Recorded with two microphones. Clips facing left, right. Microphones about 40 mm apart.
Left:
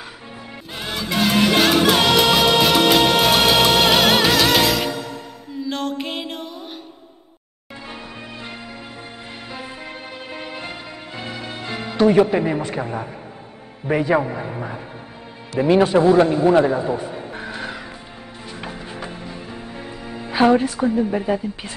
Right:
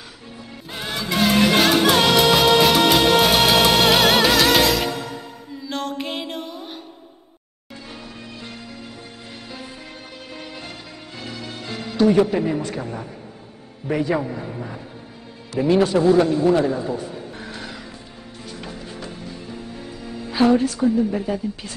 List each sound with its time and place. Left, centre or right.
0.7 s music: centre
7.9 s music: left
10.3 s music: left
12.4 s a woman's voice: left
18.5 s music: left
20.8 s a woman's voice: left